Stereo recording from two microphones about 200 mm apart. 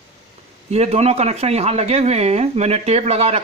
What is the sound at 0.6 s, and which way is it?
Speech, 35° right (ahead or behind).